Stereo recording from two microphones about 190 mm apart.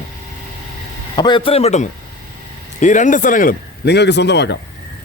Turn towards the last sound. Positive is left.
turn(degrees=65)  # may be behind; listen again after turning